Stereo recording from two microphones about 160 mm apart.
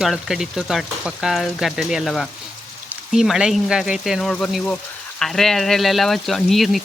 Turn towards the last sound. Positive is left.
turn(degrees=0)  # may be behind; listen again after turning